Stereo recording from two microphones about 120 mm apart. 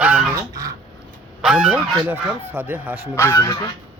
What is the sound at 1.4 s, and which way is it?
Speech, 10° right (ahead or behind).